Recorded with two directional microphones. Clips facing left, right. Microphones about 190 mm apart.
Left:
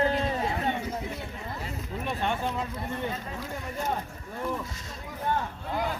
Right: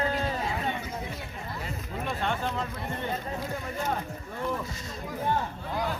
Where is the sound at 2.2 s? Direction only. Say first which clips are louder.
Left 1 dB; 10° left (ahead or behind).